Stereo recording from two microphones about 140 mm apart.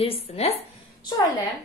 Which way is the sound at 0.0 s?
45° left (ahead or behind).